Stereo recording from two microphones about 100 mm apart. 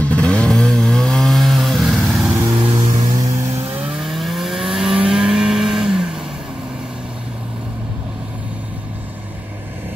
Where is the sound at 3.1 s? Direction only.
35° right (ahead or behind).